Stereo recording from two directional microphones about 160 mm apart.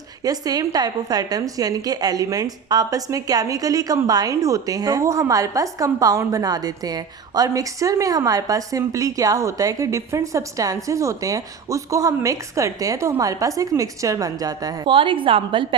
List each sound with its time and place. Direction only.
0.2 s a woman's voice: 25° right (ahead or behind)